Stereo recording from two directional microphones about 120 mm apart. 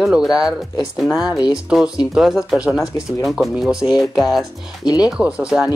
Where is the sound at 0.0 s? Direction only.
5° right (ahead or behind).